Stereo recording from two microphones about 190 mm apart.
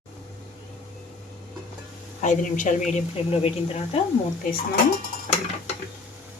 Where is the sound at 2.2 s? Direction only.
40° left (ahead or behind).